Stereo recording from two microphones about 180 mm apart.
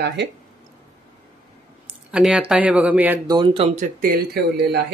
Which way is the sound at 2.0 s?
5° right (ahead or behind).